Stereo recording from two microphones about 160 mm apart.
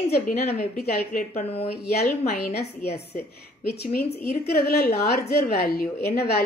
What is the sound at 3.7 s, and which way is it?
A woman's voice, 75° left (ahead or behind).